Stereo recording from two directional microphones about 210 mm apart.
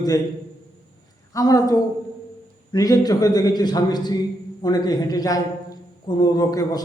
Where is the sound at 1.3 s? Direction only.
15° left (ahead or behind).